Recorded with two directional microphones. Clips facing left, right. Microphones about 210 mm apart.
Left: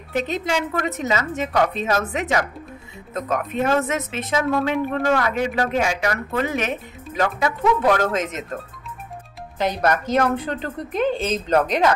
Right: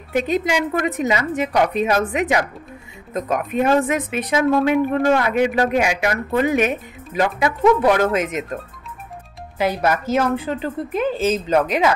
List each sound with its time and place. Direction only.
0.2 s a woman's voice: 10° right (ahead or behind)
9.6 s a woman's voice: 10° right (ahead or behind)